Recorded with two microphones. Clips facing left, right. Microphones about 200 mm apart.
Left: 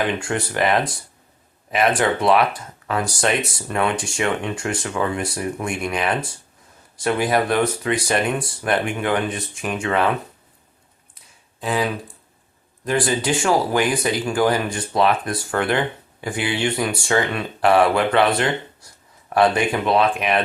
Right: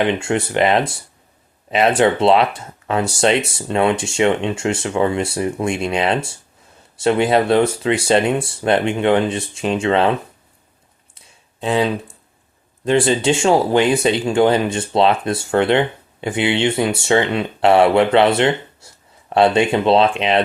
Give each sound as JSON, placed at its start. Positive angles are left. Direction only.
{"t": 0.0, "sound": "speech", "side_deg": -25}
{"t": 11.6, "sound": "speech", "side_deg": -25}